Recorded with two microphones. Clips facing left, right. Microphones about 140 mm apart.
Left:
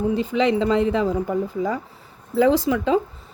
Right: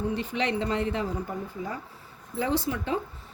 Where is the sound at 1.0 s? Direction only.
90° left.